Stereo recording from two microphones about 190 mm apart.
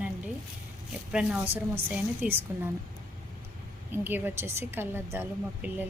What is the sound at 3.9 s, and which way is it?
A woman's voice, 10° right (ahead or behind).